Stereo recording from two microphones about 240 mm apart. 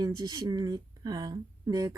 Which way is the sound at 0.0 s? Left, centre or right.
Centre.